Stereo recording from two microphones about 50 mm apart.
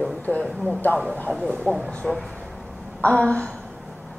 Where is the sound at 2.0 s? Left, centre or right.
Centre.